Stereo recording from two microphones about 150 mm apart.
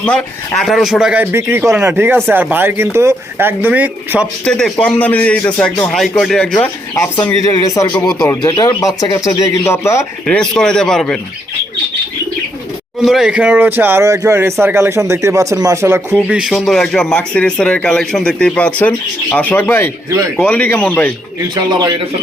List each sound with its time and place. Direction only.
0.0 s speech: 5° left (ahead or behind); by 4.3 s 10° right (ahead or behind)
4.4 s speech: 5° left (ahead or behind)
7.4 s speech: 20° left (ahead or behind)
10.2 s speech: 5° left (ahead or behind)
13.1 s speech: 5° right (ahead or behind)
16.2 s speech: 5° right (ahead or behind); by 19.9 s 15° left (ahead or behind)
20.1 s a man's voice: 20° right (ahead or behind)
20.4 s speech: 10° left (ahead or behind)
21.5 s a man's voice: 25° right (ahead or behind)